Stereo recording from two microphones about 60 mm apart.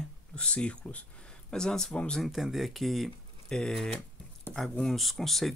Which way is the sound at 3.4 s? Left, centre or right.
Centre.